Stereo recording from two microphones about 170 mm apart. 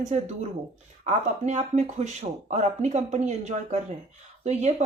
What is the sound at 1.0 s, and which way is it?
A woman's voice, 40° right (ahead or behind).